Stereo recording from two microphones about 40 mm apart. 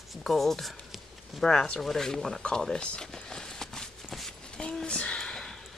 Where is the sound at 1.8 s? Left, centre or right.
Centre.